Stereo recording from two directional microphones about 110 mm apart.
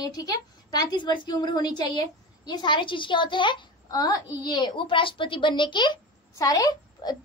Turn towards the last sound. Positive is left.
turn(degrees=35)  # may be behind; listen again after turning